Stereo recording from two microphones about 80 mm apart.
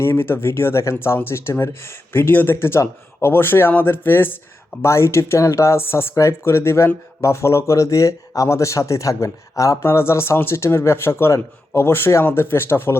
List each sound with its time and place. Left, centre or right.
0.0 s speech: left